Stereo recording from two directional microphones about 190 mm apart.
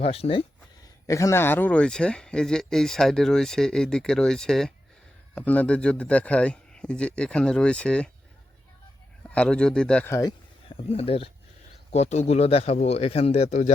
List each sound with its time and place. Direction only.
0.0 s speech: 30° left (ahead or behind)
1.0 s speech: 15° left (ahead or behind)
9.2 s speech: 5° left (ahead or behind)
10.7 s speech: 30° left (ahead or behind)